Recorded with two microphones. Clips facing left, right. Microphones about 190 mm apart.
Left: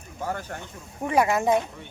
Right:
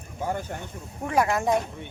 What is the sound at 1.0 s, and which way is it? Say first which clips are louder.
Speech: left 2 dB; centre (ahead or behind).